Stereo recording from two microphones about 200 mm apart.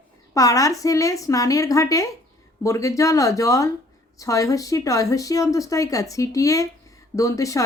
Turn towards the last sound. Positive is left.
turn(degrees=15)  # may be behind; listen again after turning